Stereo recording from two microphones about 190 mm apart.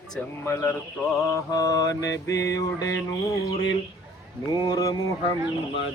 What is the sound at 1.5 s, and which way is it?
Mantra, 20° left (ahead or behind).